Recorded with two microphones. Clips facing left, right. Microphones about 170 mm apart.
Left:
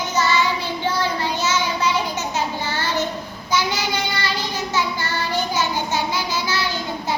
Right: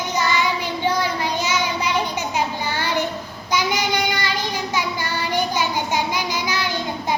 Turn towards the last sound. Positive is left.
turn(degrees=-15)  # may be behind; listen again after turning